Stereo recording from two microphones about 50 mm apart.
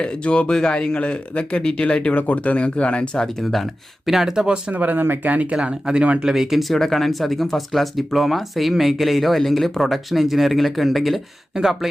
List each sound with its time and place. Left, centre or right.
0.0 s speech: left
2.1 s speech: left
4.0 s speech: centre
4.7 s speech: right
5.6 s speech: centre
6.3 s speech: centre